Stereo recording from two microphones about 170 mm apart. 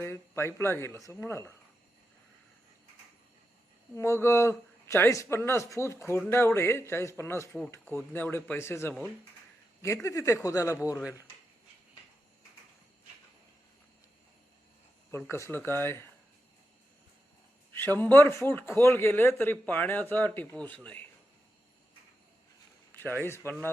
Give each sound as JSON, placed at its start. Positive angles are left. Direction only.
{"t": 0.0, "sound": "speech", "side_deg": 15}
{"t": 3.9, "sound": "speech", "side_deg": 15}
{"t": 15.3, "sound": "speech", "side_deg": 15}
{"t": 17.7, "sound": "speech", "side_deg": 10}
{"t": 22.9, "sound": "a sound", "side_deg": 10}
{"t": 23.2, "sound": "speech", "side_deg": 15}